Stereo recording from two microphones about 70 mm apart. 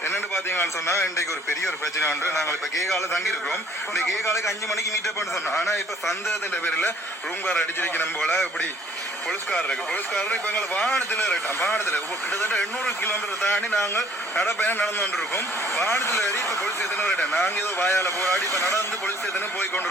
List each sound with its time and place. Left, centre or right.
0.1 s a man's voice: left
2.8 s a man's voice: centre
4.3 s a man's voice: left
10.2 s a man's voice: left
15.7 s speech: left